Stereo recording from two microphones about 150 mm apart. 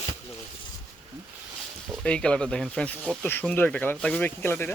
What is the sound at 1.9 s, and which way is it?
Speech, 5° left (ahead or behind).